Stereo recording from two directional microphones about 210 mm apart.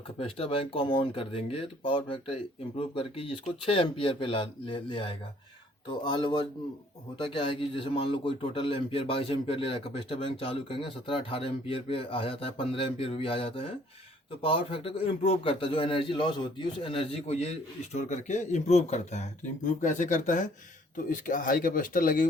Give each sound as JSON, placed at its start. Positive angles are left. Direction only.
{"t": 0.2, "sound": "speech", "side_deg": 25}